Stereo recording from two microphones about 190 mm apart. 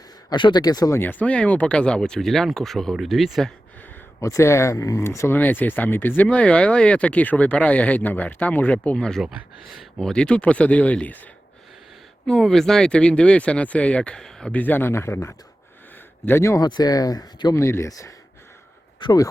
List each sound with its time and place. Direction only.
0.3 s speech: 25° left (ahead or behind); by 3.5 s centre (ahead or behind)
4.2 s speech: 15° left (ahead or behind)
12.2 s speech: centre (ahead or behind); by 19.3 s 20° left (ahead or behind)